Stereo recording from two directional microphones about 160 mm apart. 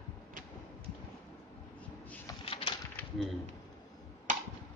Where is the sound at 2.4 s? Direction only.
35° left (ahead or behind).